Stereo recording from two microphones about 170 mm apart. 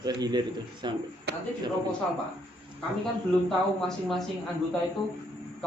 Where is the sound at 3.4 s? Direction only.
Centre (ahead or behind).